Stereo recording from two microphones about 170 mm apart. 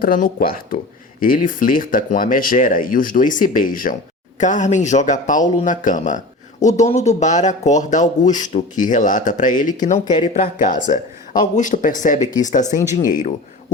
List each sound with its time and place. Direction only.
0.0 s speech: 55° left (ahead or behind)